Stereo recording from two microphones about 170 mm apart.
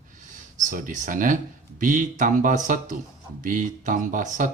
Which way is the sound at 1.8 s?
50° right (ahead or behind).